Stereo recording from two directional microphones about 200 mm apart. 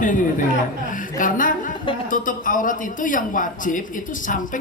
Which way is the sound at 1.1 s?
40° left (ahead or behind).